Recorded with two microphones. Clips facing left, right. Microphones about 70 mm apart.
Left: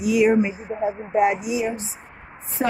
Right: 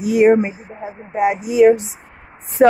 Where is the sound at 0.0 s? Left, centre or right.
Right.